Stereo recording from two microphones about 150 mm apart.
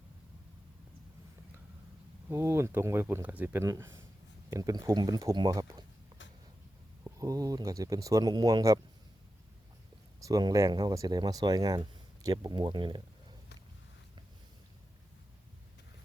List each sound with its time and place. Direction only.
2.3 s speech: 15° right (ahead or behind)
7.0 s speech: 25° right (ahead or behind)
10.2 s speech: 25° right (ahead or behind)